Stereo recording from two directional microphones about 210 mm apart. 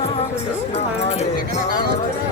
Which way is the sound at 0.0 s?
30° left (ahead or behind).